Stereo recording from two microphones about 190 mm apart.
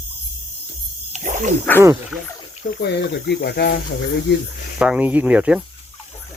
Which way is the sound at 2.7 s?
60° left (ahead or behind).